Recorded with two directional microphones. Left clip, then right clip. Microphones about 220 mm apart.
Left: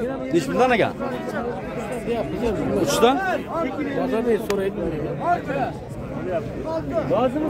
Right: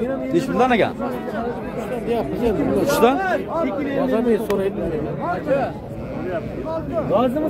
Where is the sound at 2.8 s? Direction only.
5° left (ahead or behind).